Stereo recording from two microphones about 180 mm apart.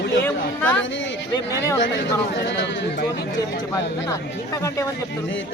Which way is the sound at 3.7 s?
15° left (ahead or behind).